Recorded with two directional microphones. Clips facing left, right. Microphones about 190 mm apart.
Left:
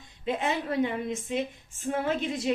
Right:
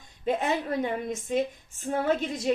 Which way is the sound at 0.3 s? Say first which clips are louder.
Right 2 dB; 40° right (ahead or behind).